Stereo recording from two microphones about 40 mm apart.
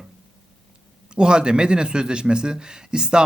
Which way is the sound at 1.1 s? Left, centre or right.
Right.